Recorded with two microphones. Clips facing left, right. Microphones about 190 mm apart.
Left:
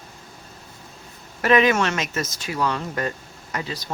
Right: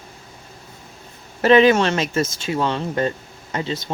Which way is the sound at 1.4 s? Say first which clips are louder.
Right 5 dB; 30° right (ahead or behind).